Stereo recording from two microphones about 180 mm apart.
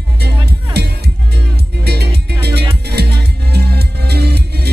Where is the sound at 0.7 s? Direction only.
65° right (ahead or behind).